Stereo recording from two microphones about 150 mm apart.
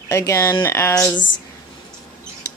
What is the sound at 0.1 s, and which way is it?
Speech, 20° left (ahead or behind).